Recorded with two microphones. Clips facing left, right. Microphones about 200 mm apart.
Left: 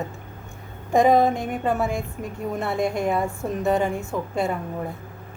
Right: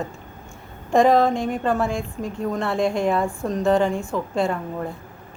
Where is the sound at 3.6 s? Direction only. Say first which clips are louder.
Right 3 dB; 5° left (ahead or behind).